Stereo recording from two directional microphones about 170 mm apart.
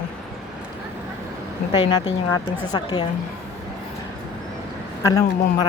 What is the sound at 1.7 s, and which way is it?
Speech, 25° left (ahead or behind).